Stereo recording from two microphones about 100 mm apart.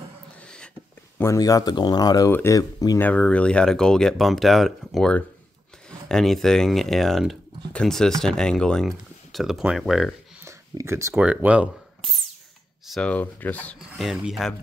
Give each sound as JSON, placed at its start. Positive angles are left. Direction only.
{"t": 0.4, "sound": "a sound", "side_deg": 10}
{"t": 1.1, "sound": "speech", "side_deg": 30}
{"t": 3.0, "sound": "speech", "side_deg": 15}
{"t": 10.4, "sound": "a sound", "side_deg": -30}
{"t": 11.1, "sound": "speech", "side_deg": -10}
{"t": 13.0, "sound": "speech", "side_deg": 15}
{"t": 13.7, "sound": "speech", "side_deg": -5}